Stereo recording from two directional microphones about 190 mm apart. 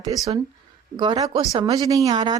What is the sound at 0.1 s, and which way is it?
A woman's voice, 20° right (ahead or behind).